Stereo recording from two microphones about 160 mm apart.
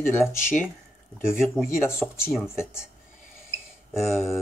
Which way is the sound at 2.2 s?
5° right (ahead or behind).